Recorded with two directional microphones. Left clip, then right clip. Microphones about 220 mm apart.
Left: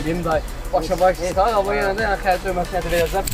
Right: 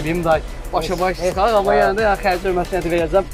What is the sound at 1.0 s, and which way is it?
Speech, 45° right (ahead or behind).